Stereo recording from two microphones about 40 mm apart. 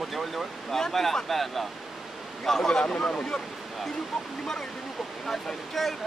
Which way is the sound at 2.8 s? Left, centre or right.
Left.